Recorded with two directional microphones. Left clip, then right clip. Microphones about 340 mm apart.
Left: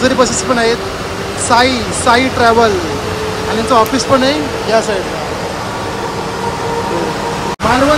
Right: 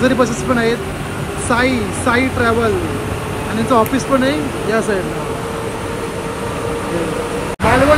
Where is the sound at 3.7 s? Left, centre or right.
Centre.